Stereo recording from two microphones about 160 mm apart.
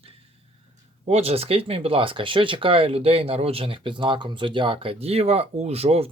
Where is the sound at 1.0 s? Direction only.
40° right (ahead or behind).